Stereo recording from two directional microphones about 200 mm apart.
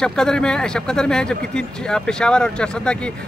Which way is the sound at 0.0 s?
5° left (ahead or behind).